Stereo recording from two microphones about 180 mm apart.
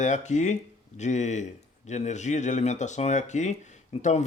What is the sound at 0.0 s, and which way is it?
Speech, 40° left (ahead or behind).